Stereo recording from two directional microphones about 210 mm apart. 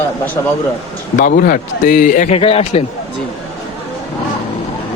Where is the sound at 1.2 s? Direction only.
40° left (ahead or behind).